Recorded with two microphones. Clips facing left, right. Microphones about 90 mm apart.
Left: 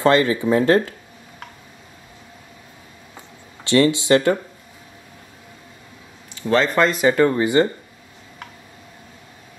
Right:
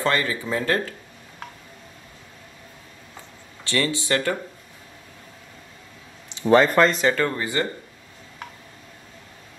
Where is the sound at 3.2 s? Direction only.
20° left (ahead or behind).